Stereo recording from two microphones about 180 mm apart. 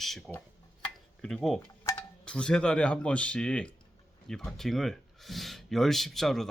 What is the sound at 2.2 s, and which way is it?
Speech, 5° left (ahead or behind).